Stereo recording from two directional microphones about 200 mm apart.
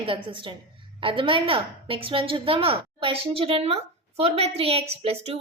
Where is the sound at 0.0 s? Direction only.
25° right (ahead or behind).